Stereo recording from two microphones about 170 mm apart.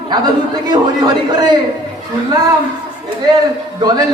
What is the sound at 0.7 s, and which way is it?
Speech, 25° right (ahead or behind).